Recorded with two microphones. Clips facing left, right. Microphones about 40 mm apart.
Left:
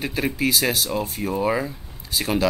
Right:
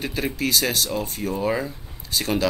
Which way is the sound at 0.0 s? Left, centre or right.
Centre.